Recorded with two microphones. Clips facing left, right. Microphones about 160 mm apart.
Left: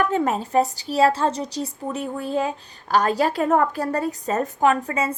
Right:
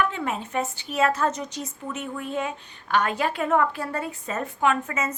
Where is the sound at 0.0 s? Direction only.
40° left (ahead or behind).